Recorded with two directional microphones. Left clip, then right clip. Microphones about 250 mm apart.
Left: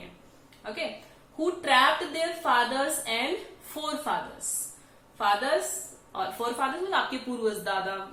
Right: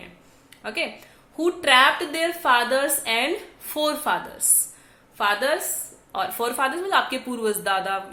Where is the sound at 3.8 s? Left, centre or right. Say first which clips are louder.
Right 10 dB; right.